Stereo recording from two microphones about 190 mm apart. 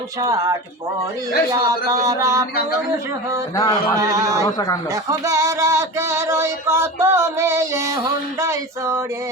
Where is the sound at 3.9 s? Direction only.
15° right (ahead or behind).